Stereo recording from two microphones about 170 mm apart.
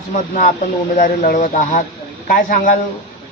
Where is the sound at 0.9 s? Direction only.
55° left (ahead or behind).